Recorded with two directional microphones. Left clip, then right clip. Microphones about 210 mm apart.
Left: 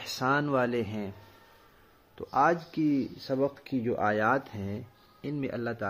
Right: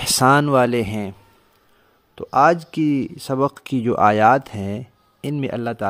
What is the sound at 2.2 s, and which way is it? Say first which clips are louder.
Speech: right 10 dB; 50° right (ahead or behind).